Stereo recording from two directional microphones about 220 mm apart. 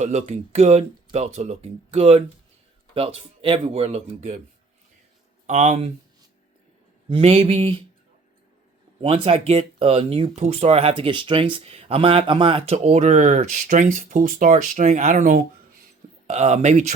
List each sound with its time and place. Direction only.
0.0 s speech: 30° right (ahead or behind)
5.5 s speech: 30° right (ahead or behind)
7.1 s speech: 25° right (ahead or behind)
9.0 s speech: 25° right (ahead or behind)